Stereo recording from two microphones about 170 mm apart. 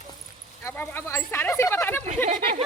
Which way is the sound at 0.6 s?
15° left (ahead or behind).